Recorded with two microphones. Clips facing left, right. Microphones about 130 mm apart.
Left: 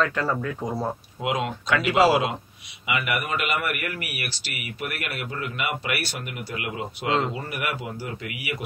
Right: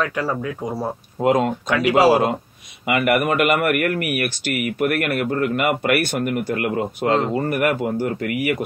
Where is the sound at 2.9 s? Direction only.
55° right (ahead or behind).